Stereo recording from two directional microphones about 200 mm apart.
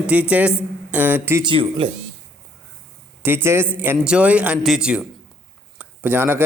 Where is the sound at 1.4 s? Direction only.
25° right (ahead or behind).